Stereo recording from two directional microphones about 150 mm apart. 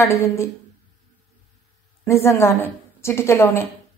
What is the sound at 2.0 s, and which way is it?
A woman's voice, 20° left (ahead or behind).